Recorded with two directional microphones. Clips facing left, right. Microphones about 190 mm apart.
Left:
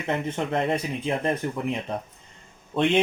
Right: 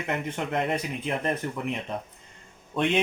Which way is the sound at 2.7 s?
25° left (ahead or behind).